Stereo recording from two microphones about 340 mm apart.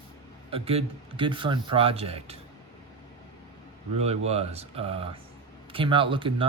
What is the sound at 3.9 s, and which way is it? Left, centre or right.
Speech, centre.